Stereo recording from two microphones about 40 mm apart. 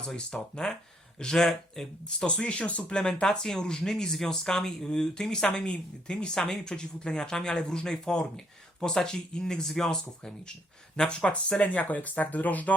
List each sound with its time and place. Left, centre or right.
0.5 s speech: centre; by 3.0 s left
3.0 s speech: centre
11.7 s speech: left